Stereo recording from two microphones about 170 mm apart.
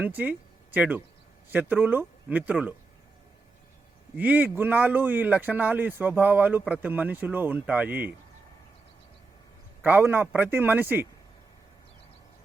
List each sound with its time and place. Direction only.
0.0 s a man's voice: 10° right (ahead or behind)
4.2 s a man's voice: 10° right (ahead or behind)
9.8 s a man's voice: 10° right (ahead or behind)